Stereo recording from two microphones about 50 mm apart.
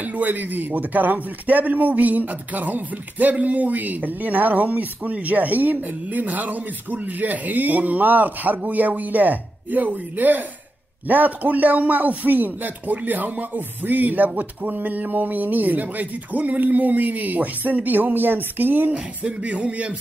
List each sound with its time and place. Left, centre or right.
0.0 s speech: right
19.2 s music: right